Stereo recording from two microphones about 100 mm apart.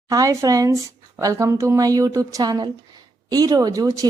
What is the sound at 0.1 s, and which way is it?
Speech, 35° right (ahead or behind).